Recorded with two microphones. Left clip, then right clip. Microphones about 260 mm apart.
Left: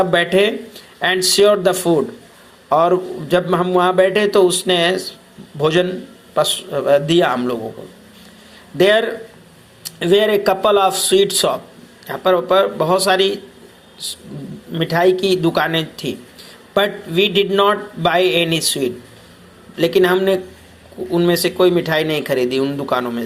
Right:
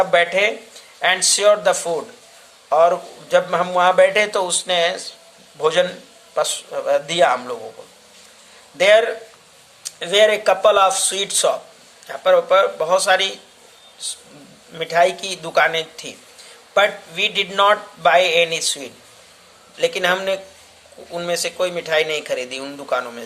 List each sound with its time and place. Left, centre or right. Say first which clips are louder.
0.0 s a man's voice: left 1 dB; centre
8.8 s a man's voice: even; centre